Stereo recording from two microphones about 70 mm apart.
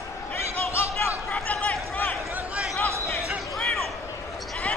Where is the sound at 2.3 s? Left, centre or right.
Right.